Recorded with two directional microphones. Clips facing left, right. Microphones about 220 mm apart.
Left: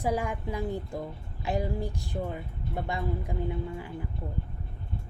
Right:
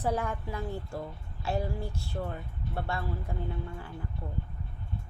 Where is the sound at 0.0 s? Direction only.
10° left (ahead or behind).